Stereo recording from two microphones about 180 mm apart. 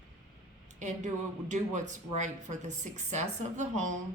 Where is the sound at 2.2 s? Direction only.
45° right (ahead or behind).